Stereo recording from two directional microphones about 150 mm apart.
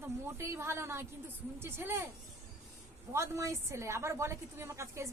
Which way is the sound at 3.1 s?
20° right (ahead or behind).